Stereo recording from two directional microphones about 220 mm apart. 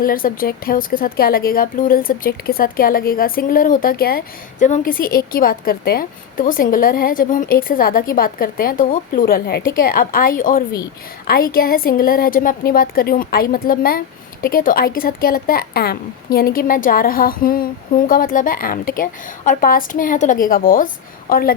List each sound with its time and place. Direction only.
0.0 s speech: 40° left (ahead or behind)